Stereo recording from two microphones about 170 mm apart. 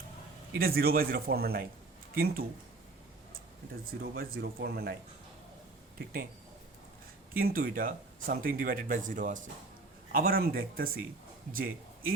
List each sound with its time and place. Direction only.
0.6 s speech: 60° right (ahead or behind)
4.0 s speech: 65° right (ahead or behind)
7.3 s speech: 60° right (ahead or behind)